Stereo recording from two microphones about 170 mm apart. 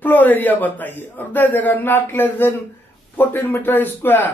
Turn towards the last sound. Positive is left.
turn(degrees=10)  # may be behind; listen again after turning